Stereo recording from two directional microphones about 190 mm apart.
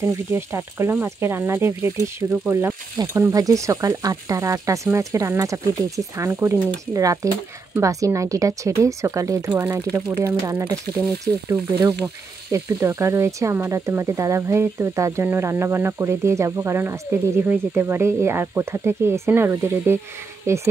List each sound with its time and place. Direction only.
0.0 s speech: 15° right (ahead or behind)
12.5 s speech: 15° right (ahead or behind)